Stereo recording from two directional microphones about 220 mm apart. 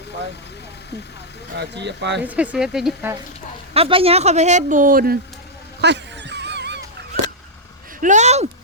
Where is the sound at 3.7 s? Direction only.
25° right (ahead or behind); by 5.2 s 40° right (ahead or behind).